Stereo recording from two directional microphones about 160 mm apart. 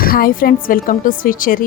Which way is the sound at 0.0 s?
65° left (ahead or behind).